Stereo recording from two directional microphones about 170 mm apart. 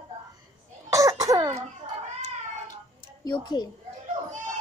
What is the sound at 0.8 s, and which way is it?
Cough, 20° right (ahead or behind).